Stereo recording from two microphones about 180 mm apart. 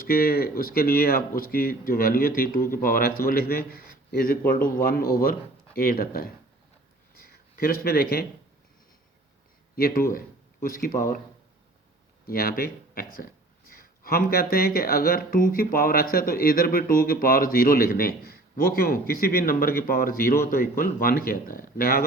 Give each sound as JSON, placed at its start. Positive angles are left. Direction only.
{"t": 0.1, "sound": "speech", "side_deg": 55}
{"t": 7.5, "sound": "speech", "side_deg": 55}
{"t": 9.7, "sound": "speech", "side_deg": 55}
{"t": 12.3, "sound": "speech", "side_deg": 55}
{"t": 13.7, "sound": "a sound", "side_deg": 55}
{"t": 14.5, "sound": "speech", "side_deg": 55}